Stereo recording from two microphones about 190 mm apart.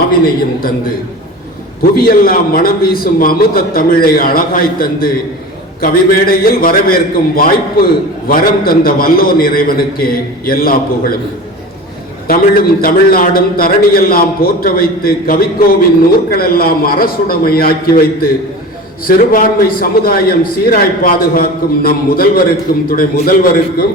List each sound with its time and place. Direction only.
2.0 s a man's voice: 50° left (ahead or behind)
12.3 s a man's voice: 50° left (ahead or behind)